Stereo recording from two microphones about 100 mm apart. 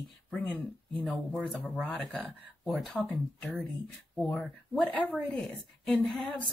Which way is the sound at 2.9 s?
10° left (ahead or behind).